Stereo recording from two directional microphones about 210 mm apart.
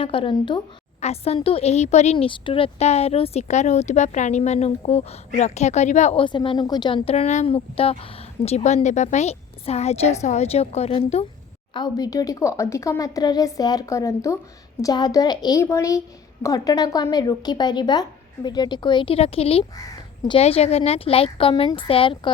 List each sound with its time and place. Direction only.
0.0 s a woman's voice: 25° left (ahead or behind)